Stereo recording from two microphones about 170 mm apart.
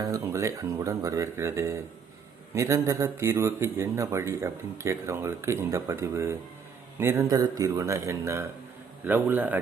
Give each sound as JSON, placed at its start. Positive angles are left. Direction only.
{"t": 0.0, "sound": "a man's voice", "side_deg": -20}